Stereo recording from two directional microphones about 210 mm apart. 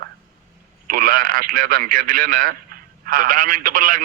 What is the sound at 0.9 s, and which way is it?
A man's voice, 40° right (ahead or behind).